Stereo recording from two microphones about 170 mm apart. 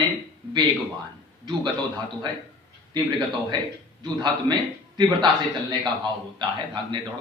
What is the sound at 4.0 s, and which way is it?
A man's voice, 25° right (ahead or behind).